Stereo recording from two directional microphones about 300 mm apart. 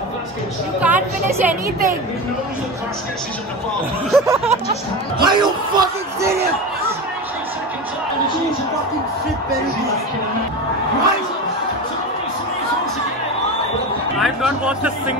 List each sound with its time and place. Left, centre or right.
0.7 s speech: centre
4.1 s speech: centre
14.2 s speech: centre